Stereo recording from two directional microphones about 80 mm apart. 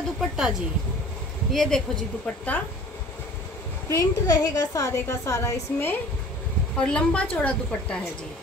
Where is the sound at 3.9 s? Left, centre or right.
Left.